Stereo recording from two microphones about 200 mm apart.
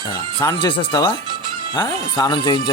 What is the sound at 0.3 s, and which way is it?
Speech, 20° left (ahead or behind).